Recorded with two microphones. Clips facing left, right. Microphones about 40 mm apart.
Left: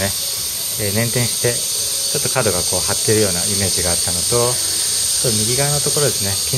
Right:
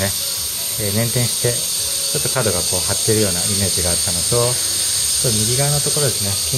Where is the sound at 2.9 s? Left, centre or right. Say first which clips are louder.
Left 2 dB; left.